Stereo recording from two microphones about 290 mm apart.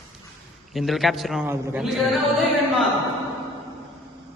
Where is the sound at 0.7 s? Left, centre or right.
Centre.